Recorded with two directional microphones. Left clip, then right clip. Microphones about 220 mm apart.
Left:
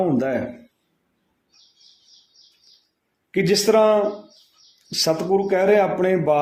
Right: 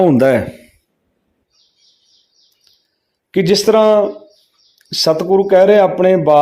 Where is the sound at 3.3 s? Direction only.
35° right (ahead or behind).